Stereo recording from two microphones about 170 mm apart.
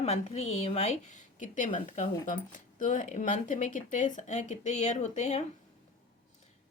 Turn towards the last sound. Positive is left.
turn(degrees=40)  # may be behind; listen again after turning